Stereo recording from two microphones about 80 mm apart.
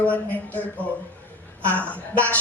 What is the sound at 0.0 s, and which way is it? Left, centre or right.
A woman's voice, centre.